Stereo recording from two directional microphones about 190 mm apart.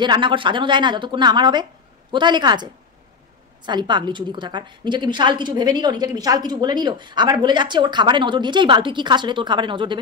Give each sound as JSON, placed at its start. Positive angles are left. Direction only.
{"t": 0.0, "sound": "a woman's voice", "side_deg": -25}